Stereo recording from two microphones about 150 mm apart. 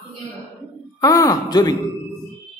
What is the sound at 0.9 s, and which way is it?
Speech, 25° left (ahead or behind).